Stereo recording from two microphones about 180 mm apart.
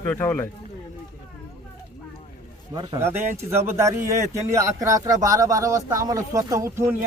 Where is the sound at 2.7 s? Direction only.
25° right (ahead or behind).